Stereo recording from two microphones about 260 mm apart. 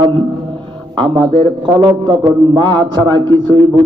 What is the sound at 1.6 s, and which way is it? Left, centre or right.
A man's voice, centre.